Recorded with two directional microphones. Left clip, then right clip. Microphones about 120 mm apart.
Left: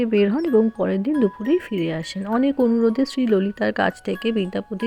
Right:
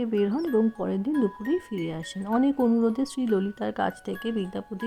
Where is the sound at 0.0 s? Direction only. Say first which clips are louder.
Left 7 dB; 30° left (ahead or behind).